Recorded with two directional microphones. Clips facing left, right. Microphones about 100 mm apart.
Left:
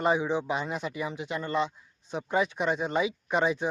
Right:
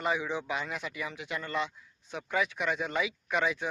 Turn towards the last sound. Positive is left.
turn(degrees=30)  # may be behind; listen again after turning